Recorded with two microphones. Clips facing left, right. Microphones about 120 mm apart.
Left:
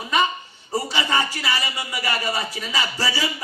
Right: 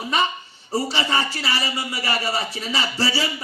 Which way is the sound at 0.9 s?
30° right (ahead or behind).